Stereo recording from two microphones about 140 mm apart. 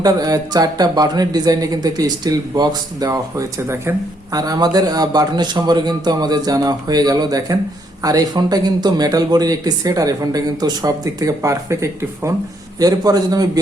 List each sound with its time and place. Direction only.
0.0 s speech: 25° right (ahead or behind)